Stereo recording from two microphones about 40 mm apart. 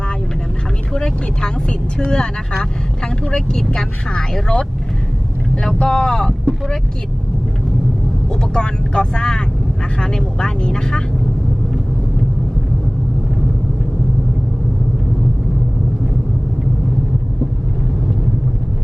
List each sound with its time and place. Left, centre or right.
0.9 s speech: centre
5.6 s speech: centre
8.3 s speech: left